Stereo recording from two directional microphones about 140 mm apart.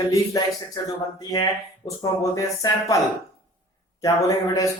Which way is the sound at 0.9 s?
30° left (ahead or behind).